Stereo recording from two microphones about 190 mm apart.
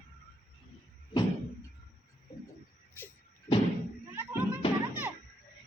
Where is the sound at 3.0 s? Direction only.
10° left (ahead or behind).